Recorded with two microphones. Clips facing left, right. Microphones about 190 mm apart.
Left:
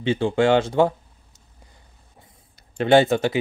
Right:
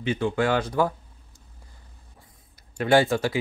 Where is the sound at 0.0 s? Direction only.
30° left (ahead or behind).